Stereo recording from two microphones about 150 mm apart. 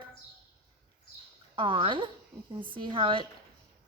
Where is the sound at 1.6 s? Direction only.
35° right (ahead or behind).